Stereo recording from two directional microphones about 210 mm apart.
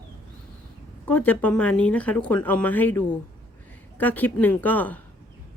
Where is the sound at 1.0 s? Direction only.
5° left (ahead or behind).